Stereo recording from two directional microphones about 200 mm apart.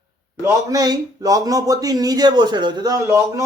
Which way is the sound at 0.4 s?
15° right (ahead or behind).